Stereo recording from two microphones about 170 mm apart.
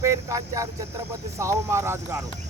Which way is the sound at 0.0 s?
15° right (ahead or behind).